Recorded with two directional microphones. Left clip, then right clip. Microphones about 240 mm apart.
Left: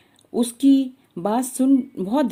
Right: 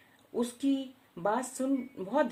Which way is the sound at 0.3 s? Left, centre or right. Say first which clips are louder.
Left 13 dB; left.